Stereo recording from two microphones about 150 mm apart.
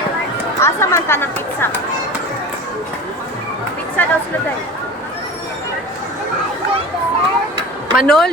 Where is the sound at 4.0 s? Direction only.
15° left (ahead or behind).